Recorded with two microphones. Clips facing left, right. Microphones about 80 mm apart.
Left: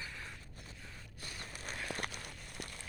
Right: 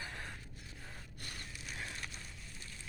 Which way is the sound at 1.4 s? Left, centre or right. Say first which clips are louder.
Left 3 dB; left.